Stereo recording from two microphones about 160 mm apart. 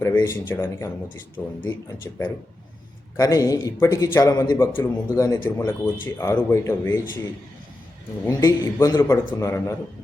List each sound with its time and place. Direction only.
0.0 s speech: 20° left (ahead or behind)
3.2 s a man's voice: 20° left (ahead or behind)
8.2 s a man's voice: 20° left (ahead or behind)